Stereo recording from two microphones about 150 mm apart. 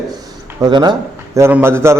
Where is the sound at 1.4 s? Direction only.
15° right (ahead or behind).